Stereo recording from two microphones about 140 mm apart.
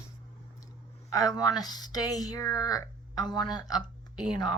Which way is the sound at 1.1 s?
25° left (ahead or behind).